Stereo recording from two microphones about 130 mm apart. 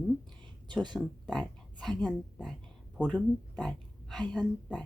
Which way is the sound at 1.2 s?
10° left (ahead or behind).